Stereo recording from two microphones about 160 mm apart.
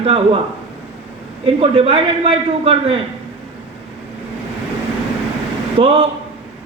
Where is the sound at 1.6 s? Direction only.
35° right (ahead or behind).